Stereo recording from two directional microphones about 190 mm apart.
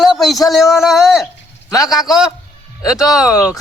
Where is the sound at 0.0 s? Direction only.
Centre (ahead or behind).